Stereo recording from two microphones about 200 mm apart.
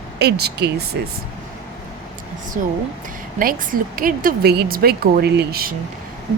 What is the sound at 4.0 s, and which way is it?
A woman's voice, 45° right (ahead or behind).